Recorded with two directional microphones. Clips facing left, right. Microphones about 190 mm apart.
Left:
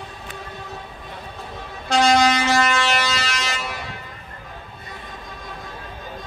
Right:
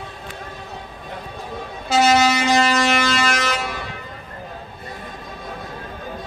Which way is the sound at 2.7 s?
45° right (ahead or behind).